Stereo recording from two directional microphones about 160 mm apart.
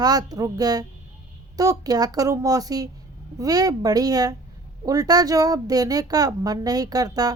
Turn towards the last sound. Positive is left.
turn(degrees=-25)  # may be behind; listen again after turning